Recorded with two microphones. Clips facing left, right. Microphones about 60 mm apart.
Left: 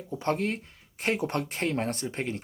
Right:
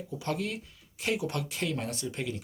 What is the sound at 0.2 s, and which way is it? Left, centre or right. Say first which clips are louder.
Speech: left 5 dB; left.